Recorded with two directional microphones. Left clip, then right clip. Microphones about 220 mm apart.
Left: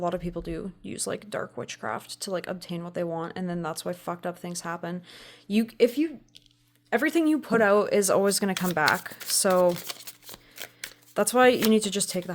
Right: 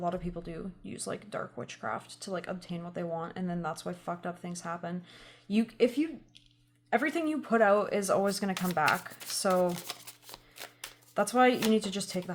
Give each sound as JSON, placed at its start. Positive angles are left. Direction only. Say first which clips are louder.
{"t": 0.0, "sound": "speech", "louder": "left 5 dB", "side_deg": 50}
{"t": 11.1, "sound": "speech", "louder": "left 5 dB", "side_deg": 50}